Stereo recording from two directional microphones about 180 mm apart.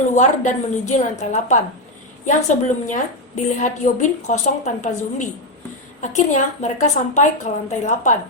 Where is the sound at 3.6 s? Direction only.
40° left (ahead or behind).